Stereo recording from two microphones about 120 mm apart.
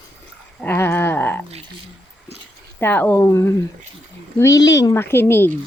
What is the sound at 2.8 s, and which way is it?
Speech, 15° left (ahead or behind).